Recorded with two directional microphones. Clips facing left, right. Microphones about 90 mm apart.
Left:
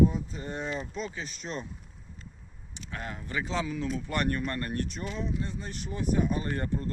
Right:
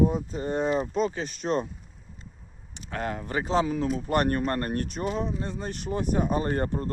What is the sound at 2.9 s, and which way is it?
Speech, 50° right (ahead or behind).